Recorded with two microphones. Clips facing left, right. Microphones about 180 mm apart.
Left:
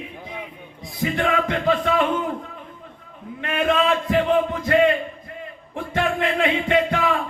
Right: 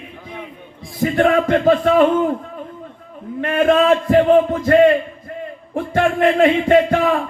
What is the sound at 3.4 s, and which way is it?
A man's voice, 45° right (ahead or behind).